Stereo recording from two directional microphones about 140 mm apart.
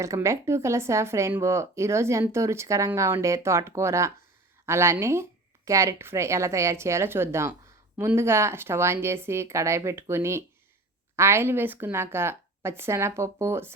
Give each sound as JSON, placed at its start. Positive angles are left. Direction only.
{"t": 0.0, "sound": "a woman's voice", "side_deg": -20}